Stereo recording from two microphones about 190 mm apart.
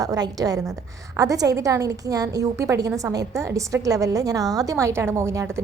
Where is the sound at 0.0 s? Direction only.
20° right (ahead or behind).